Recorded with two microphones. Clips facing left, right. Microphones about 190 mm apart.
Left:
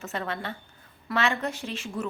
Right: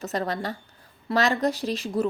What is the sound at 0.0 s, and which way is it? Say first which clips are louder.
A woman's voice: right 5 dB; 40° right (ahead or behind).